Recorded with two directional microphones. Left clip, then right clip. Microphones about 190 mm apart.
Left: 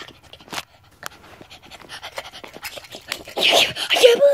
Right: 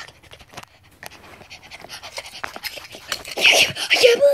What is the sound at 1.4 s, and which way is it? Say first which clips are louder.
Pant: right 3 dB; 15° left (ahead or behind).